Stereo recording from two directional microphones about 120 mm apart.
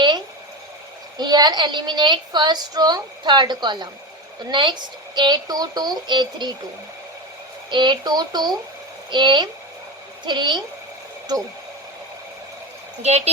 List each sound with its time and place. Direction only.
1.2 s a woman's voice: 35° right (ahead or behind)
7.7 s a woman's voice: 40° right (ahead or behind)
13.0 s speech: 65° right (ahead or behind)